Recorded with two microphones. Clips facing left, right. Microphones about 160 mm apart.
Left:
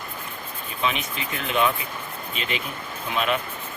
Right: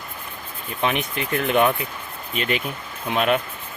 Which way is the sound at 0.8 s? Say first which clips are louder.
Right 4 dB; 55° right (ahead or behind).